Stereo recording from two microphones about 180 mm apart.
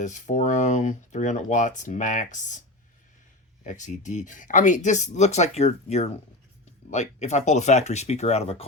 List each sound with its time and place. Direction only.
0.0 s speech: 45° left (ahead or behind)
3.7 s speech: 45° left (ahead or behind)